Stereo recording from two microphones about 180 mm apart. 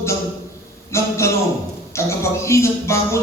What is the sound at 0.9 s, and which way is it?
A man's voice, 15° left (ahead or behind).